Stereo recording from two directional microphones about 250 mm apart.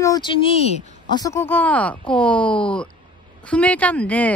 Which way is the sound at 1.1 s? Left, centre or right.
Centre.